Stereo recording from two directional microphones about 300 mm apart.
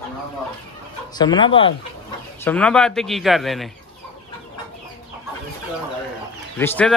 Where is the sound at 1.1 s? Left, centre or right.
Centre.